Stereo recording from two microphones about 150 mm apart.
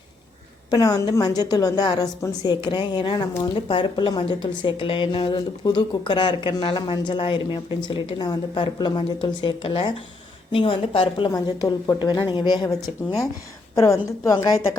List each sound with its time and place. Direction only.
0.7 s a woman's voice: 25° left (ahead or behind)
11.3 s a woman's voice: 20° left (ahead or behind)
13.7 s a woman's voice: 20° left (ahead or behind)